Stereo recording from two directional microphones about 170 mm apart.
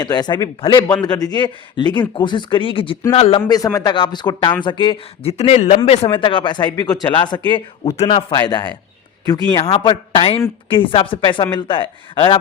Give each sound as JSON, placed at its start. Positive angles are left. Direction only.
{"t": 0.0, "sound": "speech", "side_deg": 25}
{"t": 3.5, "sound": "speech", "side_deg": 20}
{"t": 5.4, "sound": "speech", "side_deg": 45}